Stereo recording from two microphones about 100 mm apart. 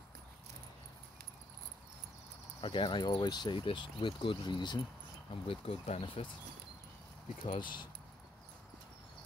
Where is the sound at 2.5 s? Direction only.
60° left (ahead or behind).